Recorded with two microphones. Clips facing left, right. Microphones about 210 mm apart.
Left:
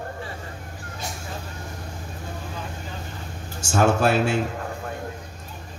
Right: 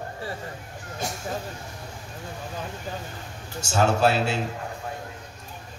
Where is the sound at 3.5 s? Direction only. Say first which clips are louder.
Left 2 dB; 50° left (ahead or behind).